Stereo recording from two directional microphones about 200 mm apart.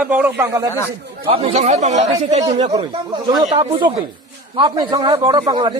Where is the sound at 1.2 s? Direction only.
30° right (ahead or behind).